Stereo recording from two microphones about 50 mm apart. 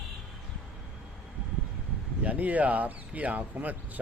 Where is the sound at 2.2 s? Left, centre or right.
Right.